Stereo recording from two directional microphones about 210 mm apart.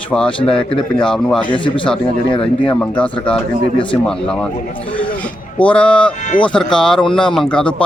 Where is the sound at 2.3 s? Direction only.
25° left (ahead or behind).